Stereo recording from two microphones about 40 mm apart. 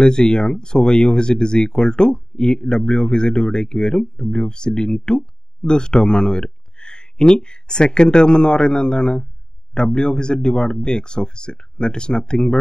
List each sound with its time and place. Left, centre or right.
0.0 s speech: left